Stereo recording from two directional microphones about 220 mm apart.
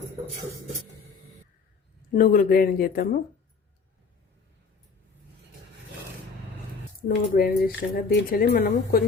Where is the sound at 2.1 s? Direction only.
40° left (ahead or behind).